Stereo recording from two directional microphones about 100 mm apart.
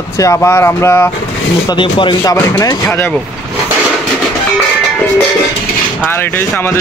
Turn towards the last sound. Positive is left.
turn(degrees=20)  # may be behind; listen again after turning